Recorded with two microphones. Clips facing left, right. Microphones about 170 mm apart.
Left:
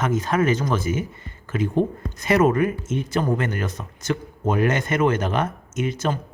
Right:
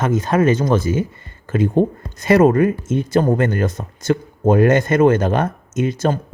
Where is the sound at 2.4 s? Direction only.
30° right (ahead or behind).